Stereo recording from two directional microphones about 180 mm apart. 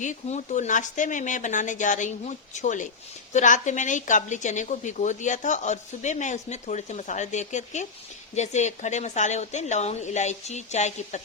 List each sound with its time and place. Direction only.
0.0 s a woman's voice: 40° left (ahead or behind)